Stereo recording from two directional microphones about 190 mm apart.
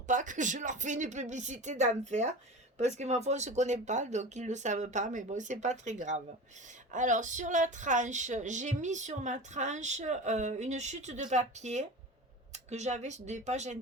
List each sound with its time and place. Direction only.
0.1 s speech: 40° right (ahead or behind)